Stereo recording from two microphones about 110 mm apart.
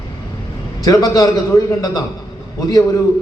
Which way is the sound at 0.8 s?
30° left (ahead or behind).